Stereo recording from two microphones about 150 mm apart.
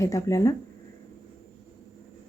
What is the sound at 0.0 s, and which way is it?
Speech, 20° left (ahead or behind).